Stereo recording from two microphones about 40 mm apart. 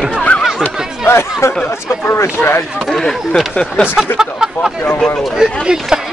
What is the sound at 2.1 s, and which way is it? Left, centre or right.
Speech, left.